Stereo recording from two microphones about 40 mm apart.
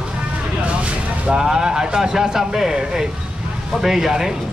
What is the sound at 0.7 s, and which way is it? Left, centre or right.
Vehicle, right.